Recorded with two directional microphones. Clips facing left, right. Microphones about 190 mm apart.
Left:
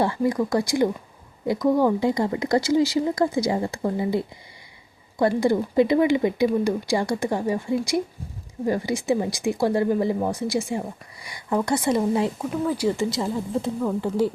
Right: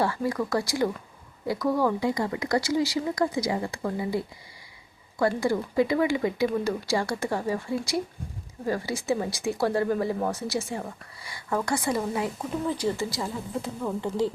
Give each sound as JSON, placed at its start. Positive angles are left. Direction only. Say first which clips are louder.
{"t": 0.0, "sound": "speech", "louder": "left 4 dB", "side_deg": 20}
{"t": 12.4, "sound": "speech", "louder": "left 4 dB", "side_deg": 10}
{"t": 13.1, "sound": "speech", "louder": "left 6 dB", "side_deg": 25}